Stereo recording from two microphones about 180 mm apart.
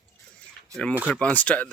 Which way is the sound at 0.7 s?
20° right (ahead or behind).